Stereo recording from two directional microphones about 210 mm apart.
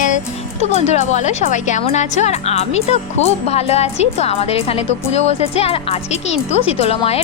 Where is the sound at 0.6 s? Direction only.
30° left (ahead or behind).